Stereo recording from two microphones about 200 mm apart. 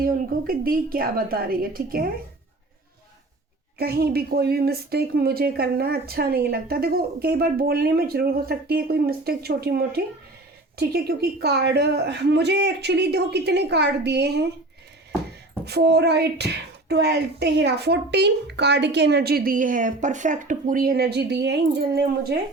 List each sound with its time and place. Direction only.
0.0 s speech: 45° right (ahead or behind)
3.8 s speech: 50° right (ahead or behind)
15.6 s speech: 55° right (ahead or behind)